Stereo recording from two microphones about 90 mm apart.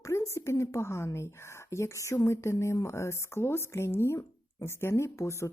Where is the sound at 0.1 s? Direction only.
35° left (ahead or behind).